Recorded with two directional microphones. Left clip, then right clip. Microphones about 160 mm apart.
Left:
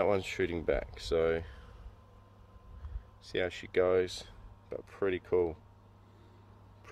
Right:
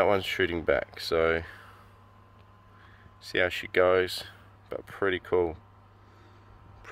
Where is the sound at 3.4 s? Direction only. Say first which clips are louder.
Right 6 dB; 5° left (ahead or behind).